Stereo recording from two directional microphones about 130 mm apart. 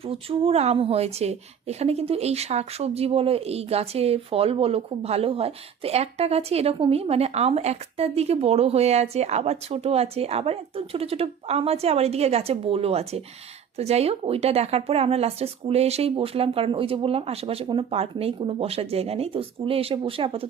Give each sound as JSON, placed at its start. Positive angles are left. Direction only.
{"t": 0.0, "sound": "a woman's voice", "side_deg": -45}